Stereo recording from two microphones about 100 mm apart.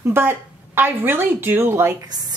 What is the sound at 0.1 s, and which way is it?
A woman's voice, 20° right (ahead or behind).